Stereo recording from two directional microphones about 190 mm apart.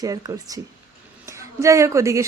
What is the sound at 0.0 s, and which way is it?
A woman's voice, 20° right (ahead or behind).